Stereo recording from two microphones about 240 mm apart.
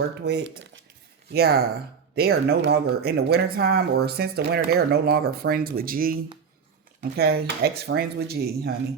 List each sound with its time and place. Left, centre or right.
0.3 s speech: right